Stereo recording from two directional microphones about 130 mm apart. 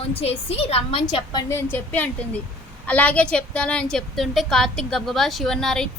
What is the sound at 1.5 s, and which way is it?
A woman's voice, 15° left (ahead or behind).